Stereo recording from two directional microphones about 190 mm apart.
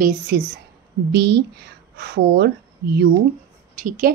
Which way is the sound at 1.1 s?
60° right (ahead or behind).